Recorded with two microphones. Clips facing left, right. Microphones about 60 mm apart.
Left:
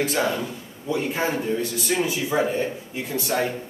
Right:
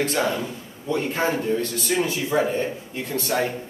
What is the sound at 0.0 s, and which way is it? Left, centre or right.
A man's voice, centre.